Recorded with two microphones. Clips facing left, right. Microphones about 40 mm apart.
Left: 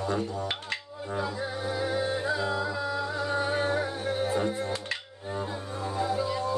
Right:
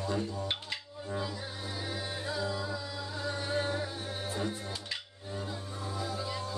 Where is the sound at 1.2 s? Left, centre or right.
Left.